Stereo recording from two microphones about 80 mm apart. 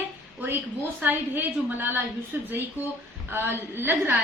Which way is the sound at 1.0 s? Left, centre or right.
Right.